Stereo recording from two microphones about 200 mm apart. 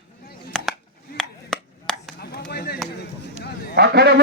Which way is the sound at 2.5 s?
55° left (ahead or behind).